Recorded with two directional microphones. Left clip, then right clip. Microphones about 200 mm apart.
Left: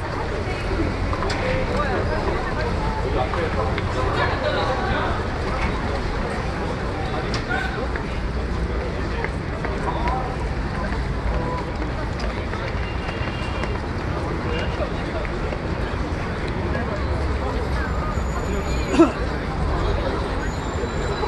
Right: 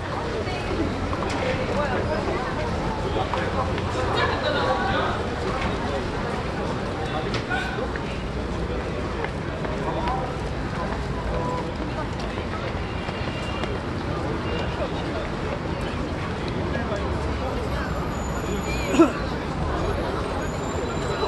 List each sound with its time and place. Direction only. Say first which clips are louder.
19.0 s hubbub: left 2 dB; 50° left (ahead or behind)